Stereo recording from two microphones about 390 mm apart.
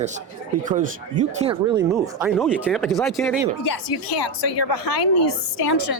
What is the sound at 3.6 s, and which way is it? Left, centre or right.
Speech, left.